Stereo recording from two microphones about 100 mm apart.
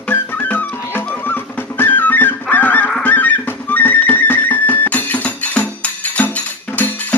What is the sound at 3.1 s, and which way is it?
Music, 20° left (ahead or behind).